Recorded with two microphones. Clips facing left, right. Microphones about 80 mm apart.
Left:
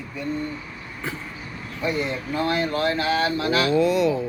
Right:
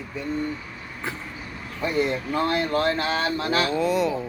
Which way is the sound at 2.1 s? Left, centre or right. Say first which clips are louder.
Right 1 dB; right.